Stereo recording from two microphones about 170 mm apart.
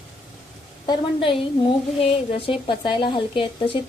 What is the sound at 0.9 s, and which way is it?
A woman's voice, 30° left (ahead or behind).